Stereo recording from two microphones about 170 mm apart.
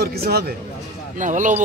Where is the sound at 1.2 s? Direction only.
50° right (ahead or behind).